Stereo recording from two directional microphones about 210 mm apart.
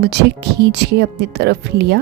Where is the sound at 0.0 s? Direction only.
55° right (ahead or behind).